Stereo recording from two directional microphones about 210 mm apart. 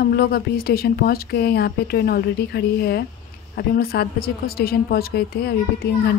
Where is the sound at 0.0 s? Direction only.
45° left (ahead or behind).